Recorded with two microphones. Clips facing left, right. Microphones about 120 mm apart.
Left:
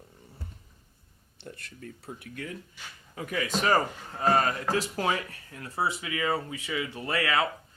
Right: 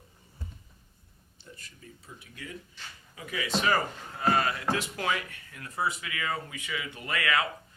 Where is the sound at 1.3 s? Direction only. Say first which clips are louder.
Left 7 dB; 60° left (ahead or behind).